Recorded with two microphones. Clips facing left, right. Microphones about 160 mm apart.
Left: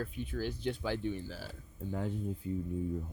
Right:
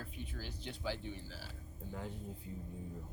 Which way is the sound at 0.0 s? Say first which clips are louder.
Left 10 dB; 60° left (ahead or behind).